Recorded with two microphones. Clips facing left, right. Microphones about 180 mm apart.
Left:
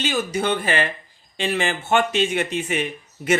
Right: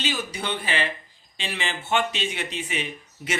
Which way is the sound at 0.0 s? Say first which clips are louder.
Left 7 dB; 50° left (ahead or behind).